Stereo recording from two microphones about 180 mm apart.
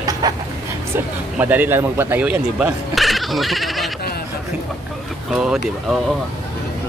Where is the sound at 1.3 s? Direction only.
10° right (ahead or behind).